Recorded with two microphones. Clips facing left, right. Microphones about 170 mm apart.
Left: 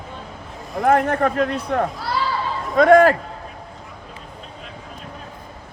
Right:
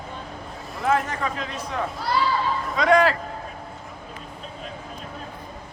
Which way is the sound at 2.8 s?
50° left (ahead or behind).